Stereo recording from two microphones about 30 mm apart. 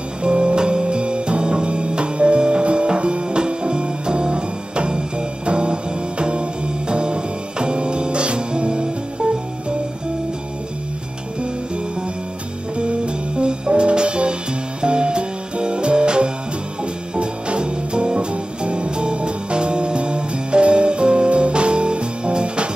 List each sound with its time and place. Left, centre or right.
0.2 s music: right
12.7 s music: right